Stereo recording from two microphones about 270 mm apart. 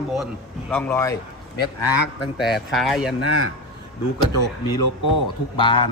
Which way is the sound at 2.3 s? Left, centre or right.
Centre.